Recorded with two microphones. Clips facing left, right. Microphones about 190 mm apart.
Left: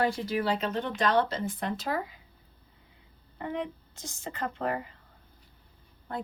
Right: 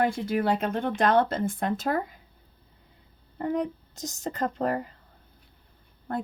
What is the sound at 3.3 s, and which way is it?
Speech, 45° right (ahead or behind).